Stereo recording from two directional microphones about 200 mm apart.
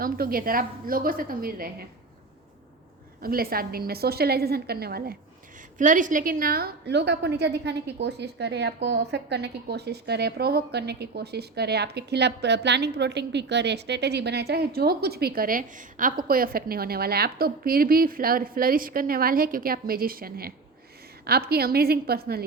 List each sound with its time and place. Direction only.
0.0 s a woman's voice: 45° right (ahead or behind)
3.2 s a woman's voice: 50° right (ahead or behind)
5.7 s a woman's voice: 40° right (ahead or behind)